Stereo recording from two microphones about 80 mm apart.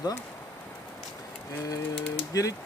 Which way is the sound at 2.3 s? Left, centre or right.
Left.